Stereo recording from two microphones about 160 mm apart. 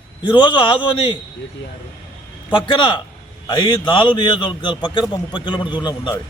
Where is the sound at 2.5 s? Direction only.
30° left (ahead or behind).